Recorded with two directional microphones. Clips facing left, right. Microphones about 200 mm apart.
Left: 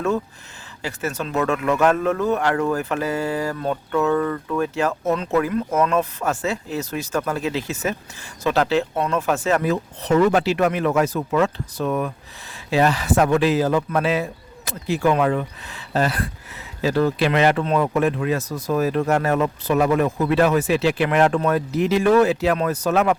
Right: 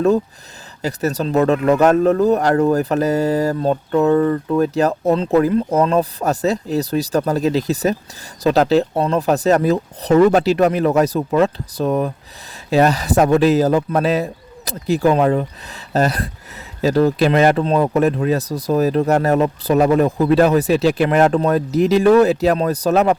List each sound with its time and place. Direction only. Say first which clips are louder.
0.8 s speech: right 6 dB; 40° right (ahead or behind)